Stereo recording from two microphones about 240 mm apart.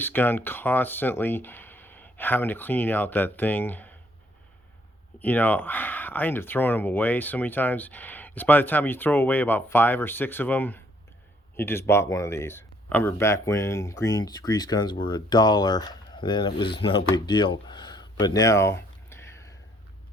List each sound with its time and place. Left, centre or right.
0.0 s speech: centre
5.2 s speech: centre
16.6 s a sound: left